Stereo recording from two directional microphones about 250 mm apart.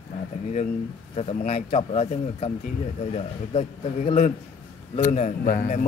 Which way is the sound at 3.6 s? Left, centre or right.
Left.